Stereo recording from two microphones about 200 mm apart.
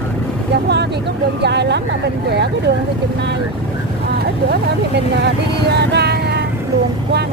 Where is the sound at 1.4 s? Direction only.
60° right (ahead or behind).